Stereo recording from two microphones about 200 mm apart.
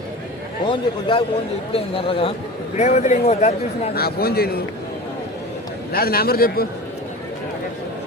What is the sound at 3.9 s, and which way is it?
Speech, 50° left (ahead or behind).